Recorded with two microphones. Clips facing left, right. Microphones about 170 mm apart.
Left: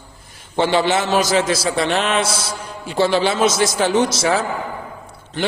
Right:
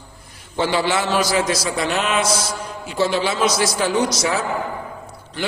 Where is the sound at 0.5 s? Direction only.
25° left (ahead or behind).